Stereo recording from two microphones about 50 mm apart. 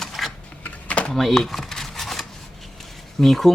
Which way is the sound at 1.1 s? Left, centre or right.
Centre.